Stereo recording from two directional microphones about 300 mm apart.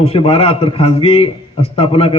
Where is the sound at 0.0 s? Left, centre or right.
Centre.